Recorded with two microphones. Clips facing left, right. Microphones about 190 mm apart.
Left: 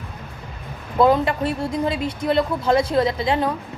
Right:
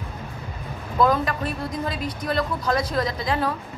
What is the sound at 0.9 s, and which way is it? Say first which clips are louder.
A woman's voice: left 4 dB; 25° left (ahead or behind).